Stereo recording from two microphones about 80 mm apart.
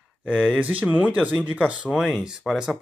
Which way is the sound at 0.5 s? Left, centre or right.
Centre.